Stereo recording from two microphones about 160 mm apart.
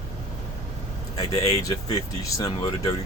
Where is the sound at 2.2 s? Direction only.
20° left (ahead or behind).